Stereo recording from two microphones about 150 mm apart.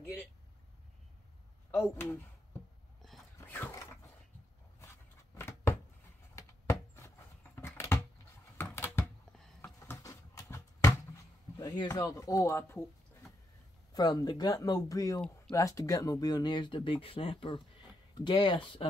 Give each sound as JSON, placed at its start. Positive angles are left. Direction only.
{"t": 1.7, "sound": "speech", "side_deg": 10}
{"t": 3.3, "sound": "a sound", "side_deg": 15}
{"t": 11.5, "sound": "speech", "side_deg": 25}
{"t": 13.9, "sound": "speech", "side_deg": 25}